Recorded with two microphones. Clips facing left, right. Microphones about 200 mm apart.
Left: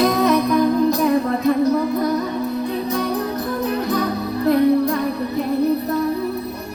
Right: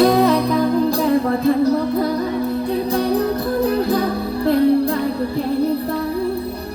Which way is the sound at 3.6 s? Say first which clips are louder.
Right 3 dB; 30° right (ahead or behind).